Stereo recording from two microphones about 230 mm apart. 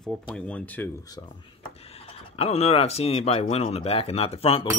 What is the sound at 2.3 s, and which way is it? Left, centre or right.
Speech, left.